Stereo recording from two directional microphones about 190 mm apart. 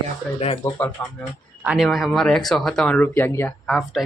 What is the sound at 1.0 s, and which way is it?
Speech, 10° left (ahead or behind).